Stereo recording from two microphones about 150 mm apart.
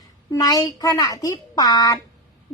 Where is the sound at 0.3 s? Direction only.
25° left (ahead or behind).